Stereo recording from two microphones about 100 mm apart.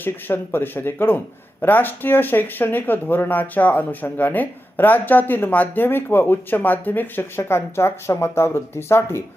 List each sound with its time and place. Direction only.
0.0 s speech: 20° left (ahead or behind)